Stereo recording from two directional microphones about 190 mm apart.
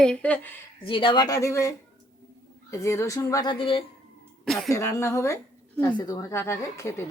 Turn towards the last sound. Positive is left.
turn(degrees=15)  # may be behind; listen again after turning